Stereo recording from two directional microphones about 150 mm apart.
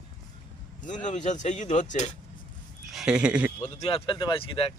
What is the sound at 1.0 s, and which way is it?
Speech, 55° left (ahead or behind).